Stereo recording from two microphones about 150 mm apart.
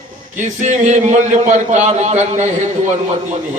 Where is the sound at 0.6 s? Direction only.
55° right (ahead or behind).